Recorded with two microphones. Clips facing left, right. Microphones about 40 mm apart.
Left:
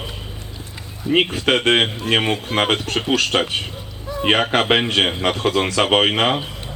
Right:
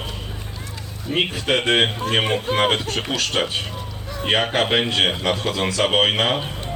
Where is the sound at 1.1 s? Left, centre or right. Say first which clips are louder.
Left 4 dB; left.